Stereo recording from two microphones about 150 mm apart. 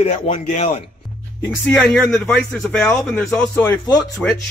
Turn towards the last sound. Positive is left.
turn(degrees=5)  # may be behind; listen again after turning